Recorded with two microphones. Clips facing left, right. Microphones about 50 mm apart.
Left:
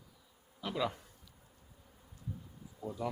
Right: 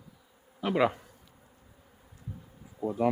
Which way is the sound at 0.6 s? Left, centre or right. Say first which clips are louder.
Right 10 dB; right.